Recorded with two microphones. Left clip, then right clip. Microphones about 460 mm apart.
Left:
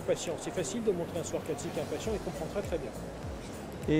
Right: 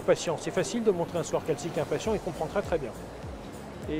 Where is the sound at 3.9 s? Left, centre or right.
Left.